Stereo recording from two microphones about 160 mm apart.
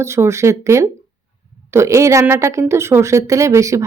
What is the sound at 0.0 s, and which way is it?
A woman's voice, 15° right (ahead or behind).